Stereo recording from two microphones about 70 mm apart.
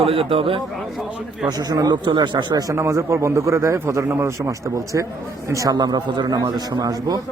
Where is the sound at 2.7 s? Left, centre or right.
Right.